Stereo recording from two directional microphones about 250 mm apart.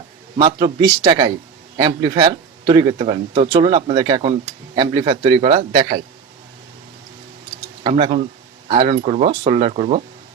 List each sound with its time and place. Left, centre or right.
0.3 s speech: centre
7.9 s speech: right